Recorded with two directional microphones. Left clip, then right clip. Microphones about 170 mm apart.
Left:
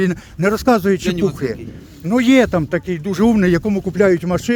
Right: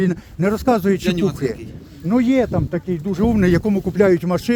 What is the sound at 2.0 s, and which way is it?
Speech, 50° left (ahead or behind).